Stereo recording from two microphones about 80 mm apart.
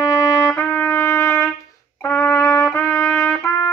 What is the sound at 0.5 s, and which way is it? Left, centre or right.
Trumpet, left.